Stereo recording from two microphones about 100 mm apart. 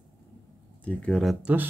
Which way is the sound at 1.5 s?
15° right (ahead or behind).